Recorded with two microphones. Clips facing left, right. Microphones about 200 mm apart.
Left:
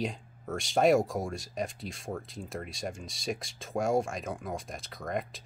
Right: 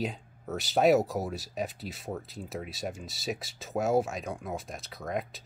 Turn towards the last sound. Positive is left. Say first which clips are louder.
# even
turn(degrees=0)  # may be behind; listen again after turning